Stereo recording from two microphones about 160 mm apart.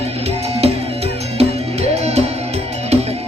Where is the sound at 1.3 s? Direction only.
40° right (ahead or behind).